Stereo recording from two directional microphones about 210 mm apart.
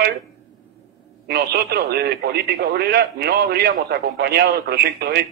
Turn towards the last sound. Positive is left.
turn(degrees=-50)  # may be behind; listen again after turning